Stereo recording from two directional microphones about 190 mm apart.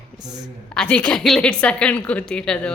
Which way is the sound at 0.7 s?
5° left (ahead or behind).